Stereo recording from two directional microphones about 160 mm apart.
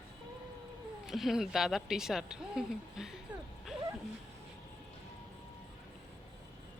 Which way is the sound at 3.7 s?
5° right (ahead or behind).